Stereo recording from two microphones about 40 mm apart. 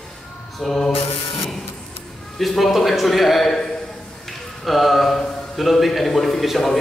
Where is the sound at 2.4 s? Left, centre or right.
Centre.